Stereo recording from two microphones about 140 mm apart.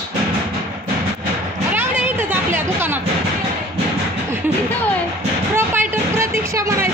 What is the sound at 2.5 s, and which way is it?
Music, 15° right (ahead or behind).